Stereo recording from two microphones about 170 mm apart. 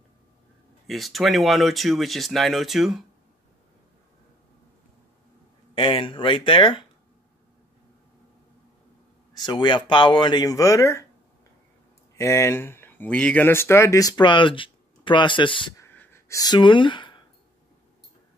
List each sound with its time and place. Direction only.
0.8 s speech: centre (ahead or behind)
5.8 s speech: 30° left (ahead or behind)
9.3 s speech: 25° left (ahead or behind)
12.2 s speech: 15° left (ahead or behind)
15.8 s a sound: 10° left (ahead or behind); by 17.2 s 30° left (ahead or behind)